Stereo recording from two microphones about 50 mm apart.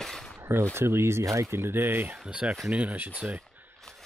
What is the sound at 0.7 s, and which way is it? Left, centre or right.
Speech, right.